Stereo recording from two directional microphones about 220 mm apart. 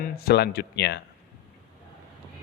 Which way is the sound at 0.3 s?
45° left (ahead or behind).